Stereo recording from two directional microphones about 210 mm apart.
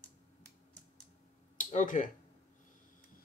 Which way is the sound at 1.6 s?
35° left (ahead or behind).